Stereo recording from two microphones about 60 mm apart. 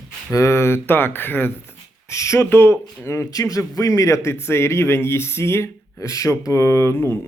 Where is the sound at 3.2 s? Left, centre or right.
Left.